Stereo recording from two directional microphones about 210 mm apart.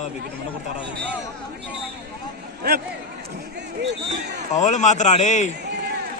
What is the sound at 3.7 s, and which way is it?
Speech, 55° right (ahead or behind).